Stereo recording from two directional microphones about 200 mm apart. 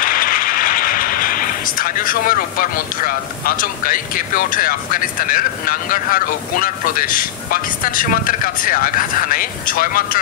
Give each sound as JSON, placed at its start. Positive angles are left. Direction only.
{"t": 0.0, "sound": "speech", "side_deg": 45}